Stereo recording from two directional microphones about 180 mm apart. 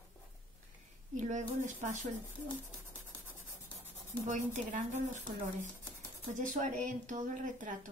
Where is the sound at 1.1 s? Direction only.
40° right (ahead or behind).